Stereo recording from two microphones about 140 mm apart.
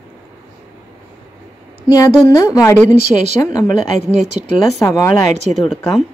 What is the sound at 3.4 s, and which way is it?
Speech, 25° left (ahead or behind).